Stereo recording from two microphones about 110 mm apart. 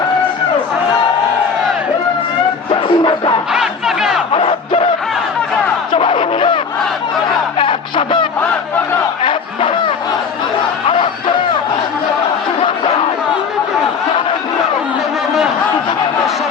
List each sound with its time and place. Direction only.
2.6 s music: 45° left (ahead or behind)
3.5 s battle cry: 5° right (ahead or behind)
4.3 s battle cry: 50° left (ahead or behind)
5.9 s music: 50° left (ahead or behind)
7.6 s music: 45° left (ahead or behind)
9.2 s battle cry: 50° left (ahead or behind)
10.8 s music: 50° left (ahead or behind)